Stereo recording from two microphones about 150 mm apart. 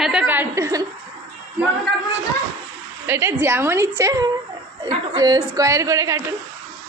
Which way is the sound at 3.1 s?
15° right (ahead or behind).